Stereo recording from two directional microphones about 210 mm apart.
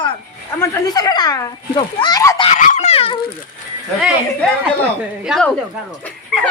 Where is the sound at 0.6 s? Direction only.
20° left (ahead or behind).